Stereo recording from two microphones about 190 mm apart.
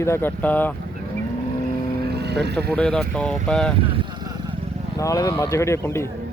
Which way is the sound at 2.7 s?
5° left (ahead or behind).